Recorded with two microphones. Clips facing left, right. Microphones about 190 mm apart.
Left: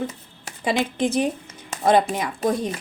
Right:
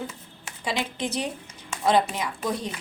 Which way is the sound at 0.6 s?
50° left (ahead or behind).